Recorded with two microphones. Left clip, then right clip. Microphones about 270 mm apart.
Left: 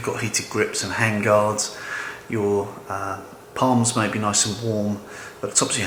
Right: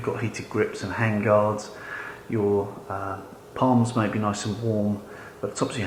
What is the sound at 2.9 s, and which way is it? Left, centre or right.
Speech, centre.